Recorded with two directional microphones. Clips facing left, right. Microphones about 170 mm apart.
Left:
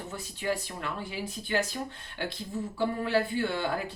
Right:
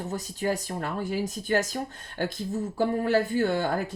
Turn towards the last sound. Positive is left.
turn(degrees=-45)  # may be behind; listen again after turning